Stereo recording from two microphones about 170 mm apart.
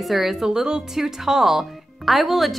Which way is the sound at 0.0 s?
Centre (ahead or behind).